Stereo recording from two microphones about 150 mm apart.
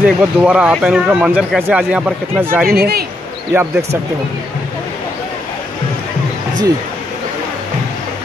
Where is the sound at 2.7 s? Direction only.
90° right.